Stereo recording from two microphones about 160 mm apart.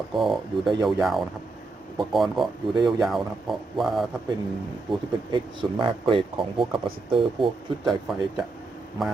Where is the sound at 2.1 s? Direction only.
Centre (ahead or behind).